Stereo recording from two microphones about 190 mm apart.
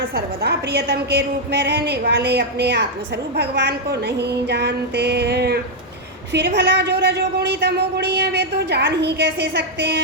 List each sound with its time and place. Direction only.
0.1 s a woman's voice: 60° right (ahead or behind)